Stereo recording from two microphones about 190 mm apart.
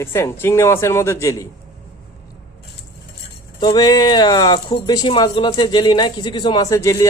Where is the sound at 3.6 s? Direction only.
20° left (ahead or behind).